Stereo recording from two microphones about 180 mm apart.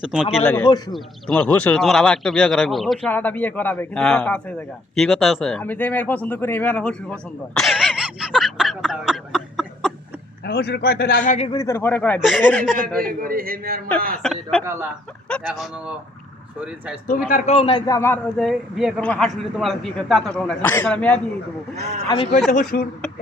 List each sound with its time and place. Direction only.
0.0 s speech: 5° right (ahead or behind)
0.6 s a man's voice: 25° left (ahead or behind)
0.9 s speech: 5° left (ahead or behind)
10.4 s a man's voice: 60° left (ahead or behind)
11.2 s speech: 40° left (ahead or behind)
11.5 s a man's voice: 15° left (ahead or behind)
13.2 s a man's voice: 55° right (ahead or behind)
14.2 s speech: 5° left (ahead or behind)
14.6 s speech: 15° right (ahead or behind)
15.4 s speech: 5° right (ahead or behind)
17.2 s a man's voice: 45° left (ahead or behind); by 21.2 s 5° left (ahead or behind)
22.1 s speech: 30° left (ahead or behind)
22.5 s speech: 50° left (ahead or behind)